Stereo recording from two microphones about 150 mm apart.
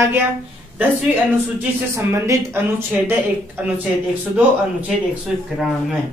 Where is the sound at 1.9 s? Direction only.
20° right (ahead or behind).